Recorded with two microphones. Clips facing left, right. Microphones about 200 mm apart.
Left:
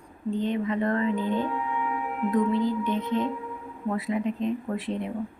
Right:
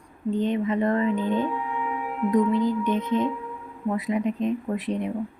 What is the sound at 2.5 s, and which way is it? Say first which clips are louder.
Speech: right 2 dB; 20° right (ahead or behind).